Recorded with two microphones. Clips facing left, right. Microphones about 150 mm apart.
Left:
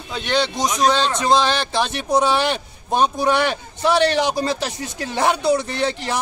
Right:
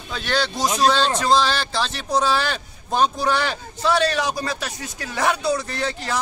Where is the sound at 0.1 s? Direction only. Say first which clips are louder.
Left 3 dB; 20° left (ahead or behind).